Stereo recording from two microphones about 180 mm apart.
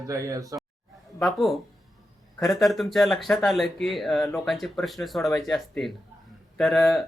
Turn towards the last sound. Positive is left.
turn(degrees=0)  # may be behind; listen again after turning